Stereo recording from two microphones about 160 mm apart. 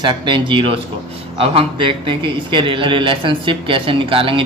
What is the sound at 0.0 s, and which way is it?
A man's voice, 30° right (ahead or behind).